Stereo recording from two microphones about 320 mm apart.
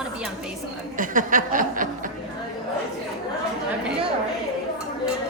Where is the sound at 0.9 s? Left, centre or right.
Right.